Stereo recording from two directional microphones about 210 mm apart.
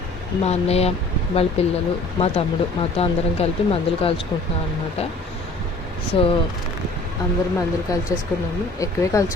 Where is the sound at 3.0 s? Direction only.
25° left (ahead or behind).